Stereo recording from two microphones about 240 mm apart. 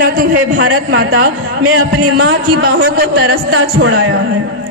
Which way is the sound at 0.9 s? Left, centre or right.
Right.